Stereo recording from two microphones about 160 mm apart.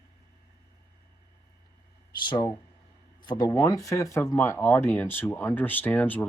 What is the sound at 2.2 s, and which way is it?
Speech, 30° left (ahead or behind).